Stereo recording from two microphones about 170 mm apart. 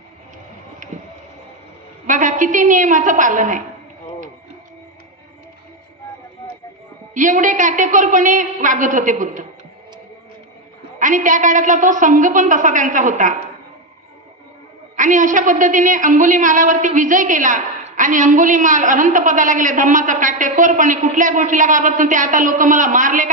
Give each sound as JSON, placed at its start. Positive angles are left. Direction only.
{"t": 0.9, "sound": "a sound", "side_deg": -45}
{"t": 2.0, "sound": "a woman's voice", "side_deg": -50}
{"t": 7.1, "sound": "a woman's voice", "side_deg": -50}
{"t": 11.0, "sound": "a woman's voice", "side_deg": -50}
{"t": 14.9, "sound": "a woman's voice", "side_deg": -50}